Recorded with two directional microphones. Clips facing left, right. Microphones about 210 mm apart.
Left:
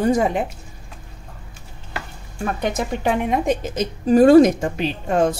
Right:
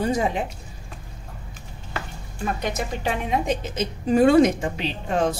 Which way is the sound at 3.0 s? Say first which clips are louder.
Left 5 dB; 50° left (ahead or behind).